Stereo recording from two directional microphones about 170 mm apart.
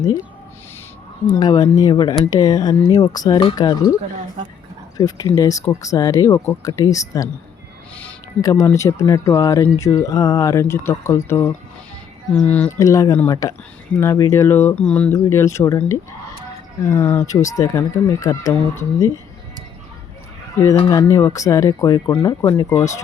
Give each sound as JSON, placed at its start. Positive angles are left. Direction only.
{"t": 1.3, "sound": "speech", "side_deg": 25}
{"t": 4.9, "sound": "speech", "side_deg": 20}
{"t": 8.4, "sound": "speech", "side_deg": 20}
{"t": 12.8, "sound": "speech", "side_deg": 20}
{"t": 20.6, "sound": "speech", "side_deg": 15}